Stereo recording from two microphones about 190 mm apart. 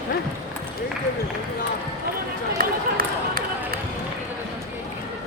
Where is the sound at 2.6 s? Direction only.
50° right (ahead or behind).